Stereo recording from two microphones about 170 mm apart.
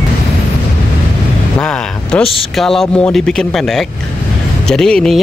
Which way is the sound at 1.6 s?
5° left (ahead or behind).